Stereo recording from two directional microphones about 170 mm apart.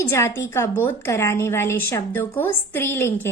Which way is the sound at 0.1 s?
15° left (ahead or behind).